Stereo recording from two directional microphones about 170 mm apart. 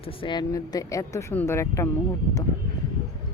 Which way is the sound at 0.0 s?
30° left (ahead or behind).